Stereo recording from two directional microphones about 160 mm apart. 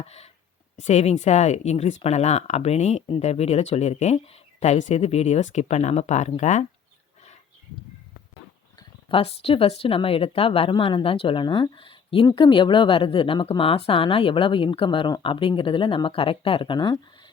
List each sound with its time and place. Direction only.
0.0 s speech: 40° left (ahead or behind)
8.8 s speech: 30° left (ahead or behind)